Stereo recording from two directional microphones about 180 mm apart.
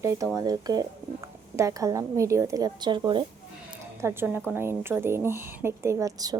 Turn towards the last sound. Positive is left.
turn(degrees=-20)  # may be behind; listen again after turning